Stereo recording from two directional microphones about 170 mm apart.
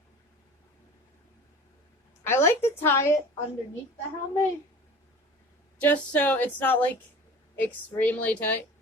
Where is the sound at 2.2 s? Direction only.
15° left (ahead or behind).